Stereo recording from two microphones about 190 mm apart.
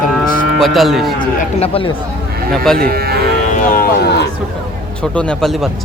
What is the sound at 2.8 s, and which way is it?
Speech, 50° right (ahead or behind).